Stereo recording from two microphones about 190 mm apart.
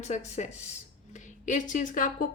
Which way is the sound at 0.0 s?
35° left (ahead or behind).